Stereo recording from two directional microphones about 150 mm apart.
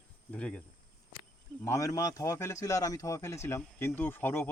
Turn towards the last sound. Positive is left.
turn(degrees=15)  # may be behind; listen again after turning